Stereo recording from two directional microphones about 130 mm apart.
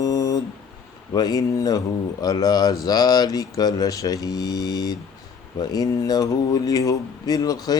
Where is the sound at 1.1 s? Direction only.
30° left (ahead or behind).